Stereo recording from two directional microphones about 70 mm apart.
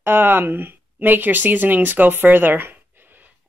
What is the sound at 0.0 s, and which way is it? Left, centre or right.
Speech, right.